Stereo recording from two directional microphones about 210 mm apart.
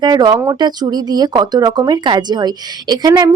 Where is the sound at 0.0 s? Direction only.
20° right (ahead or behind).